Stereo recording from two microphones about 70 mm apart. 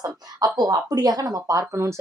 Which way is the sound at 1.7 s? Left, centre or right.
Right.